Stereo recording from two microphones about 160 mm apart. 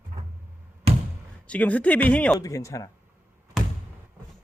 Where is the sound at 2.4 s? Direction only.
20° left (ahead or behind).